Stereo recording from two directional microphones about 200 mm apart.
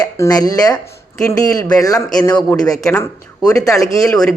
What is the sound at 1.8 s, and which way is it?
Speech, 20° left (ahead or behind).